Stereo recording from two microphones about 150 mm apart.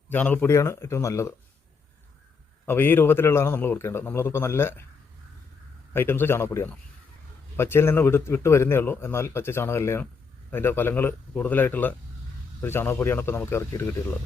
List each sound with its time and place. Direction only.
0.1 s a man's voice: 10° left (ahead or behind)
2.6 s a man's voice: 15° left (ahead or behind)
5.9 s a man's voice: 15° left (ahead or behind)